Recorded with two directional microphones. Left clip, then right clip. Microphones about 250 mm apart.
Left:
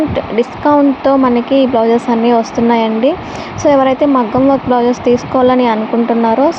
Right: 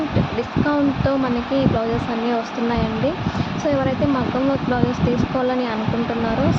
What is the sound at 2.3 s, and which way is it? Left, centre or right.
Speech, left.